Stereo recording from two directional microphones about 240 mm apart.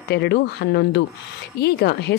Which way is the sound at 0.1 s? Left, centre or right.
Left.